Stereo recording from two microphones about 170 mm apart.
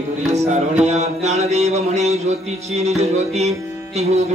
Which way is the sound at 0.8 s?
40° right (ahead or behind).